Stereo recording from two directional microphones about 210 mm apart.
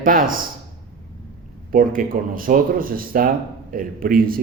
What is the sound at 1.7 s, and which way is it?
A man's voice, 40° right (ahead or behind).